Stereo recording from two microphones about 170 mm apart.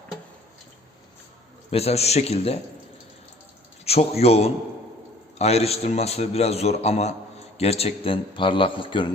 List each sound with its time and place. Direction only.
1.7 s a man's voice: 35° left (ahead or behind)
3.8 s a man's voice: 35° left (ahead or behind)